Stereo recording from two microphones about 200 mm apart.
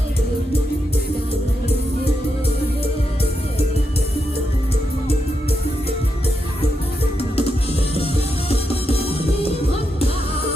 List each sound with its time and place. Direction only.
7.2 s music: 30° left (ahead or behind)